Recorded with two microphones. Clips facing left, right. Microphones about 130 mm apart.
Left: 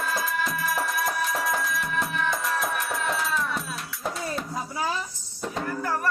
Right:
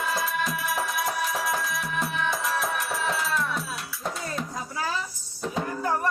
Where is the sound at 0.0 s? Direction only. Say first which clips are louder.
Even; centre (ahead or behind).